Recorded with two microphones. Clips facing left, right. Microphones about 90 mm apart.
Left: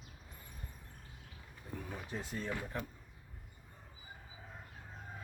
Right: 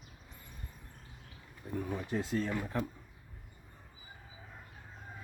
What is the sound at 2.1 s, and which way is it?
Speech, 90° right.